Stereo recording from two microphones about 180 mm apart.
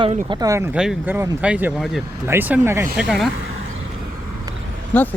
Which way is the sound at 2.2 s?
10° right (ahead or behind).